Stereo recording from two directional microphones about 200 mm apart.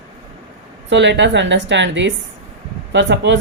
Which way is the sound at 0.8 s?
60° right (ahead or behind).